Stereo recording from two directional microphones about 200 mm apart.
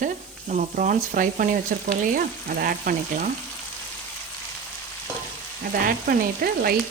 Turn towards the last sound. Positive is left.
turn(degrees=-50)  # may be behind; listen again after turning